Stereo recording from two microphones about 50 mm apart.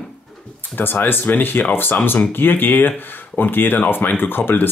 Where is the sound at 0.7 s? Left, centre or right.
Left.